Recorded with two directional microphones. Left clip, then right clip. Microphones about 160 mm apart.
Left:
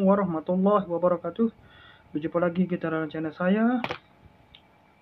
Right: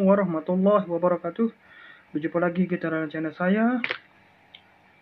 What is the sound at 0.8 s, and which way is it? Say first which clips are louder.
Speech: right 1 dB; 10° right (ahead or behind).